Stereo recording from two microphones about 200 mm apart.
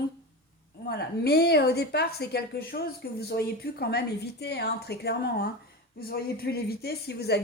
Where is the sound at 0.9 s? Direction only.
55° left (ahead or behind).